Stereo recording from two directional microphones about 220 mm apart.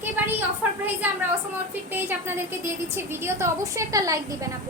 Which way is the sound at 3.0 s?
10° right (ahead or behind).